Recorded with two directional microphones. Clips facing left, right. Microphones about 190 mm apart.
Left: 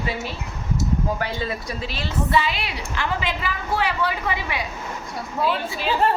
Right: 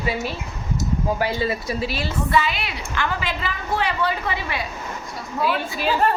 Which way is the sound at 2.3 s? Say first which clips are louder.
Right 1 dB; 30° left (ahead or behind).